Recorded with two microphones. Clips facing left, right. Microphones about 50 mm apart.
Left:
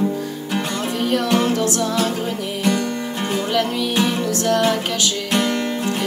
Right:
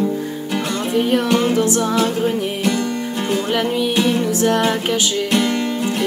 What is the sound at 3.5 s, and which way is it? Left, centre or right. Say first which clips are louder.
Music: right 1 dB; centre.